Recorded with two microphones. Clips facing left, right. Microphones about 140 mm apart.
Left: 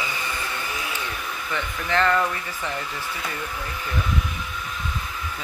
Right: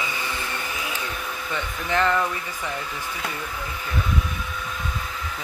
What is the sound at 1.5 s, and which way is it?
Speech, 15° right (ahead or behind).